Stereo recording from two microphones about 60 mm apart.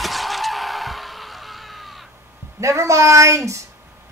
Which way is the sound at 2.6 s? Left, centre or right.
Right.